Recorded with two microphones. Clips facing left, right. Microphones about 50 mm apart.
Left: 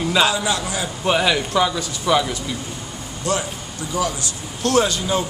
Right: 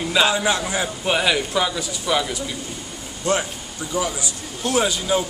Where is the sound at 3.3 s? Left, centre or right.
Right.